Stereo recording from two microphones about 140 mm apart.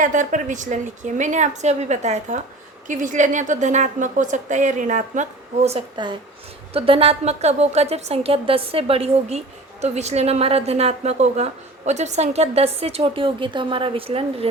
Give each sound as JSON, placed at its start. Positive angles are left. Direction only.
{"t": 0.0, "sound": "a woman's voice", "side_deg": -65}
{"t": 2.8, "sound": "a woman's voice", "side_deg": -70}
{"t": 6.7, "sound": "a woman's voice", "side_deg": -40}